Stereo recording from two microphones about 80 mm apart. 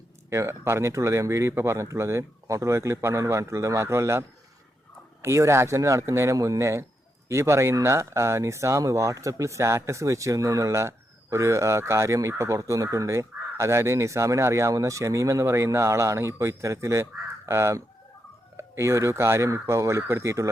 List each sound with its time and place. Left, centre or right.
0.3 s speech: right